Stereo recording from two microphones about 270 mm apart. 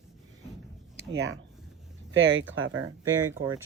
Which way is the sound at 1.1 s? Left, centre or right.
Right.